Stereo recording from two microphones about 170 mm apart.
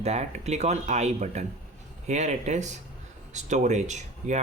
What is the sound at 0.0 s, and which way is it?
Speech, 40° right (ahead or behind).